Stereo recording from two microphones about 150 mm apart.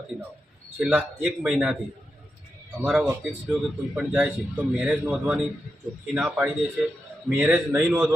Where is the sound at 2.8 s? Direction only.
Centre (ahead or behind).